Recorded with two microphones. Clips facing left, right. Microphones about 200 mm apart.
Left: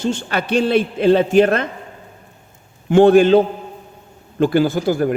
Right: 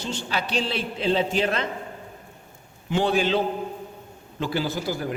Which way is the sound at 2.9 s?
50° left (ahead or behind).